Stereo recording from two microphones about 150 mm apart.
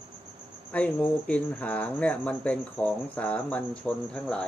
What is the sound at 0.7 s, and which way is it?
Speech, 10° left (ahead or behind).